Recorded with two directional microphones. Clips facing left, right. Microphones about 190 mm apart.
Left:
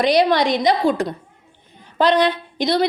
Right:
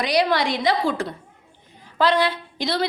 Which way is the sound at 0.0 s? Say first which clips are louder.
Left 5 dB; 25° left (ahead or behind).